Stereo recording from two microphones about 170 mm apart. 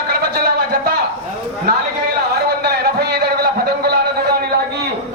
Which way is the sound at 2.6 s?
70° right (ahead or behind).